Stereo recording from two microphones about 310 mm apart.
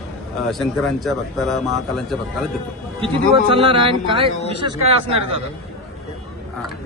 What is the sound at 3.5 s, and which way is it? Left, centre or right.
Speech, centre.